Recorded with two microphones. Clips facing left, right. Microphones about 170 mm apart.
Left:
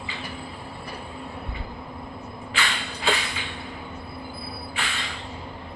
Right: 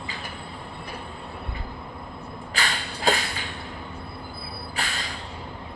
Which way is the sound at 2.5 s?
40° right (ahead or behind).